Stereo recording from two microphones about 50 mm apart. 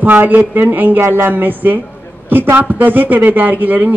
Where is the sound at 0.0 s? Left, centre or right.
Right.